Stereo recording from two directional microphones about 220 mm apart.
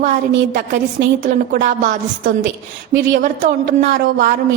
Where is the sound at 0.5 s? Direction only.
45° right (ahead or behind).